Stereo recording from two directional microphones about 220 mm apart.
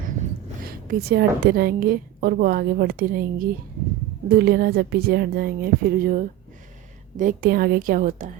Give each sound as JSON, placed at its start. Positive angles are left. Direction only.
{"t": 0.6, "sound": "a woman's voice", "side_deg": -40}